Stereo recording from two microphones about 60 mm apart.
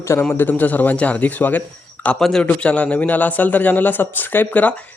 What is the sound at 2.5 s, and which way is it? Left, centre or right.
Speech, left.